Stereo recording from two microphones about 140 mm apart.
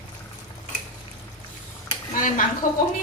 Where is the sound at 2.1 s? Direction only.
75° left (ahead or behind).